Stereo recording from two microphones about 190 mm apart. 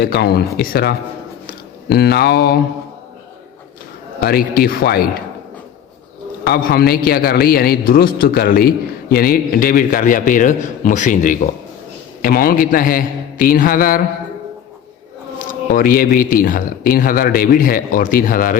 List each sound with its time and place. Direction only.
0.0 s speech: 55° left (ahead or behind)
4.2 s a man's voice: 55° left (ahead or behind)
6.4 s a man's voice: 55° left (ahead or behind)
15.4 s a man's voice: 50° left (ahead or behind)